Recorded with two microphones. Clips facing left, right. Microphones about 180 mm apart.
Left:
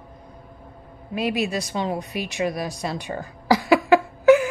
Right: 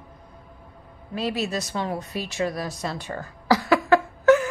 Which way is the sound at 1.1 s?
15° left (ahead or behind).